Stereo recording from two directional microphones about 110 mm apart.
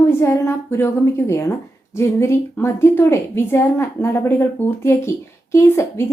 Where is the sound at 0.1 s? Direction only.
25° left (ahead or behind).